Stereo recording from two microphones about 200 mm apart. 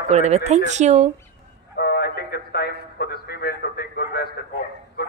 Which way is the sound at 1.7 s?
50° left (ahead or behind).